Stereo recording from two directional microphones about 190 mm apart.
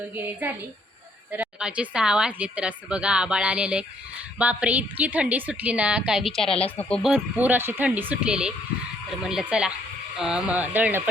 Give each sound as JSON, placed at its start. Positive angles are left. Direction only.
{"t": 0.1, "sound": "a woman's voice", "side_deg": -10}